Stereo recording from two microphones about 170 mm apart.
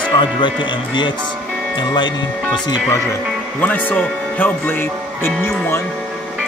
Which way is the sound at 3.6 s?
10° left (ahead or behind).